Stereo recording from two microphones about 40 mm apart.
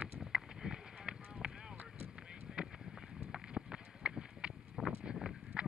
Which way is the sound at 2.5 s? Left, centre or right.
Centre.